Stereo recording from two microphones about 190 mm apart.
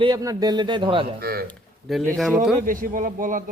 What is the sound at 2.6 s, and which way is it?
Speech, 45° right (ahead or behind).